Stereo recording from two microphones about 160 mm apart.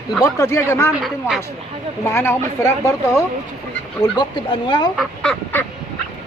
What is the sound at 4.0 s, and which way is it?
Speech, 30° left (ahead or behind).